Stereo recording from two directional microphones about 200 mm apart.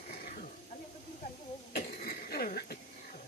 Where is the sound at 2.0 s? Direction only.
50° left (ahead or behind).